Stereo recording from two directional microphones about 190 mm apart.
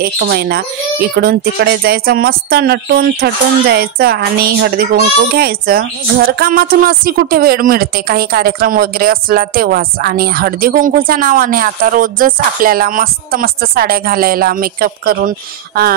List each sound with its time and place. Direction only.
0.0 s speech: 55° right (ahead or behind)